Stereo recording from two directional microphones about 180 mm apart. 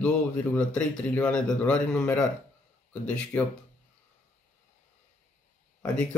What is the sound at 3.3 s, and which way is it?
Speech, 10° left (ahead or behind).